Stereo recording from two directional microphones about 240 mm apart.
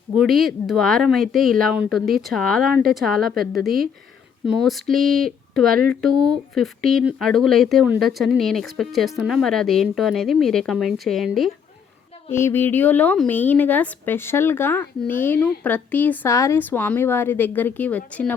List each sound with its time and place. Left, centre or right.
0.2 s speech: centre
5.6 s speech: right
5.9 s speech: centre
6.1 s speech: centre
6.5 s a woman's voice: centre